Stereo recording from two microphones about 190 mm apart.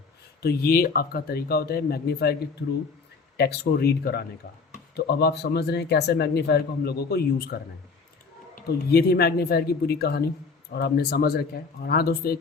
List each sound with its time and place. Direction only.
0.4 s a man's voice: 55° left (ahead or behind)
8.5 s a man's voice: 55° left (ahead or behind)